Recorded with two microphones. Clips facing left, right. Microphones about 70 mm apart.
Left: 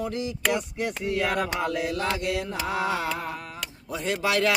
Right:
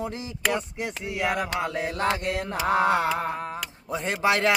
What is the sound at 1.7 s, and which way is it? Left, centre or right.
Speech, right.